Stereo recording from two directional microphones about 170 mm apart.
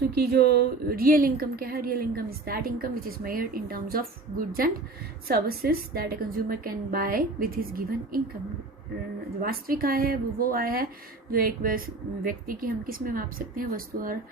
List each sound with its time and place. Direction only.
0.1 s a woman's voice: 65° right (ahead or behind)
9.4 s a woman's voice: 60° right (ahead or behind)